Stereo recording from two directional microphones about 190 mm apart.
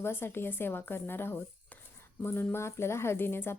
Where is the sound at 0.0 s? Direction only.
10° left (ahead or behind).